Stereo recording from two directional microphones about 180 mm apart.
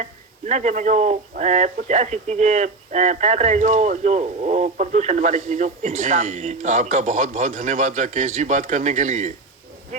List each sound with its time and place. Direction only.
0.0 s speech: 40° right (ahead or behind)